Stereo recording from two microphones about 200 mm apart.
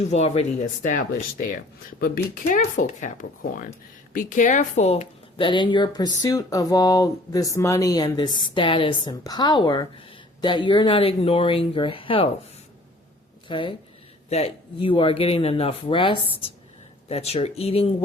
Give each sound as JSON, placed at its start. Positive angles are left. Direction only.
{"t": 0.1, "sound": "speech", "side_deg": 35}
{"t": 13.5, "sound": "speech", "side_deg": 25}